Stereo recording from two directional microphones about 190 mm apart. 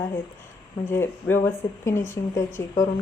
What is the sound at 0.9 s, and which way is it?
Speech, 10° left (ahead or behind).